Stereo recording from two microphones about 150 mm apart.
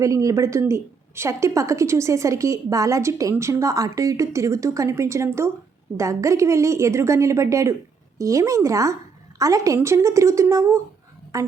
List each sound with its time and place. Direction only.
0.0 s a woman's voice: 20° right (ahead or behind)